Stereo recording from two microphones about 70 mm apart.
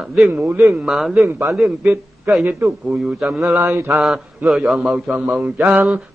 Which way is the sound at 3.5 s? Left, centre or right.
Right.